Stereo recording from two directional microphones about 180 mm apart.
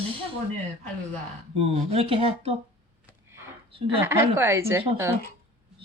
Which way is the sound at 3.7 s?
30° right (ahead or behind).